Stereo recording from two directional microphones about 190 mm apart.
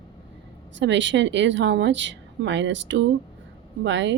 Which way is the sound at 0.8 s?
70° right (ahead or behind).